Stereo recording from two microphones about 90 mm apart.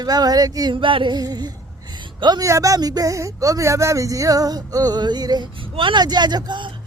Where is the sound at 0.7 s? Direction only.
70° right (ahead or behind).